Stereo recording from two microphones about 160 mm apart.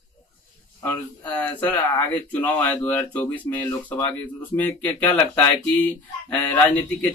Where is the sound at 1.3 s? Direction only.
10° left (ahead or behind).